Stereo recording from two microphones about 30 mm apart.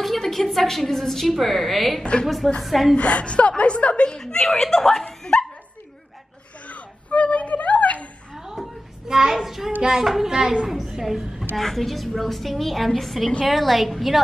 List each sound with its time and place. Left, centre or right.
0.2 s a woman's voice: centre
3.0 s a woman's voice: left
4.5 s a woman's voice: centre
5.3 s dog: left
6.7 s a sound: left
8.4 s a sound: centre
9.3 s child singing: centre
10.3 s a woman's voice: right
10.9 s a woman's voice: centre
11.5 s a woman's voice: centre